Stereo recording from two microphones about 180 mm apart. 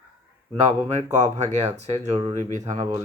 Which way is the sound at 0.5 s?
35° right (ahead or behind).